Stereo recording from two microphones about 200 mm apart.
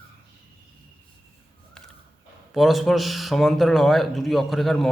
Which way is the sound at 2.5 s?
Centre (ahead or behind).